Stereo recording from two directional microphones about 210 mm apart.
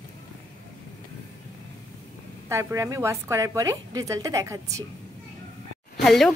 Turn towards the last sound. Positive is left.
turn(degrees=0)  # may be behind; listen again after turning